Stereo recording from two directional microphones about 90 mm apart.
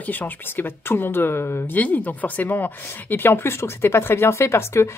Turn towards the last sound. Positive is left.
turn(degrees=30)  # may be behind; listen again after turning